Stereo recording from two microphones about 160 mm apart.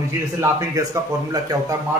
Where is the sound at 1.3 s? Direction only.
25° right (ahead or behind).